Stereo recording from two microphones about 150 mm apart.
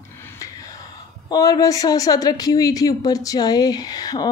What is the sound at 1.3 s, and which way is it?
A woman's voice, 25° left (ahead or behind).